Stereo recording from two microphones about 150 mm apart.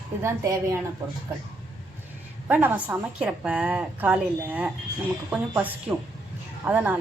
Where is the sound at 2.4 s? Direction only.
10° right (ahead or behind).